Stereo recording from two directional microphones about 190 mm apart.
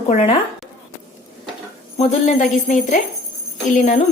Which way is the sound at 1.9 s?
35° left (ahead or behind).